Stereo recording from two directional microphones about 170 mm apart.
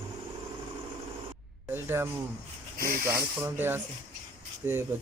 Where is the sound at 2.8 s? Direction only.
60° right (ahead or behind).